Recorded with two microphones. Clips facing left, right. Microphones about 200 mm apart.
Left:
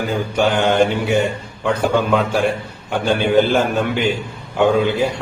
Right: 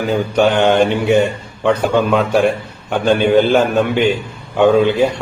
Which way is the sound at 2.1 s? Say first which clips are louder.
Right 3 dB; centre (ahead or behind).